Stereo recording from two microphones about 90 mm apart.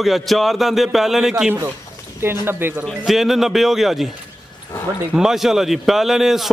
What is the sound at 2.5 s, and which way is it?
Speech, 25° right (ahead or behind).